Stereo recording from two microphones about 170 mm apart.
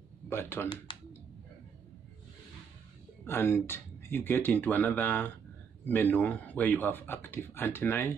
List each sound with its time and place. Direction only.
0.3 s a man's voice: 15° left (ahead or behind)
0.9 s a sound: 30° left (ahead or behind)
3.3 s a man's voice: 10° left (ahead or behind)